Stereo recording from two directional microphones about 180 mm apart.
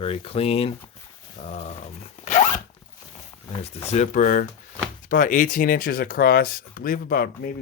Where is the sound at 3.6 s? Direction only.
35° left (ahead or behind).